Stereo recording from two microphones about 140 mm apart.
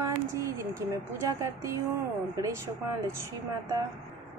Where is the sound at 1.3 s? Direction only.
20° right (ahead or behind).